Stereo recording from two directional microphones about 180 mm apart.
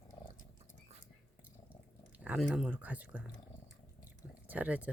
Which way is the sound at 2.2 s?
5° right (ahead or behind).